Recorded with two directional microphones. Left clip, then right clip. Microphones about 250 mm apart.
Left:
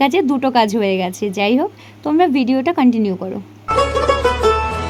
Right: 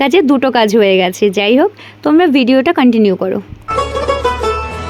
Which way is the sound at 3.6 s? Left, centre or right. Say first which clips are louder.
Left 1 dB; centre.